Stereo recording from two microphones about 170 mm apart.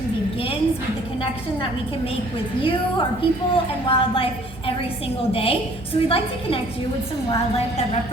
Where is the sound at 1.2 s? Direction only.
30° left (ahead or behind).